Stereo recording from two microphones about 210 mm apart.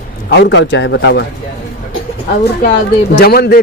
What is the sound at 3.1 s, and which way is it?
Speech, 50° left (ahead or behind).